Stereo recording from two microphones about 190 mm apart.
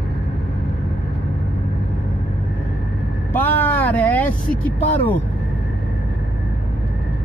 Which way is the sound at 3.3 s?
10° left (ahead or behind).